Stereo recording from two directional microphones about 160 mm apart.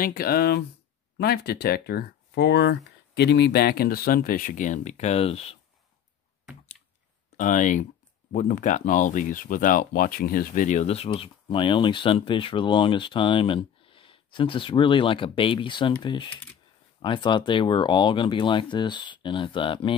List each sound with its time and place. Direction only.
0.0 s speech: 70° left (ahead or behind); by 5.6 s 40° left (ahead or behind)
7.3 s speech: 50° left (ahead or behind); by 19.9 s 30° left (ahead or behind)